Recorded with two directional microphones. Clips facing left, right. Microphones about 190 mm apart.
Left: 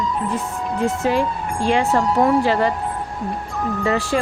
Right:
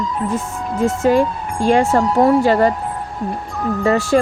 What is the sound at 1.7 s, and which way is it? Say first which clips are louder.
Speech: right 4 dB; 45° right (ahead or behind).